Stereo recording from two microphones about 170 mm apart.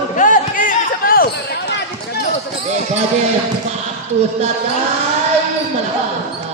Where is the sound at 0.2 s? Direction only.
50° left (ahead or behind).